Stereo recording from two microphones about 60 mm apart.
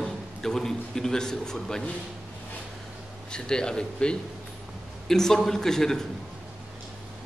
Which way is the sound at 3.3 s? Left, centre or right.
Centre.